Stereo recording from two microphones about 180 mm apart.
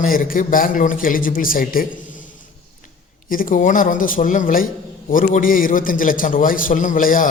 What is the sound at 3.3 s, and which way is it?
A man's voice, 50° left (ahead or behind).